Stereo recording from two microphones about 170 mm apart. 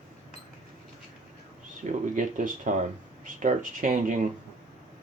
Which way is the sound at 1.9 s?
50° right (ahead or behind).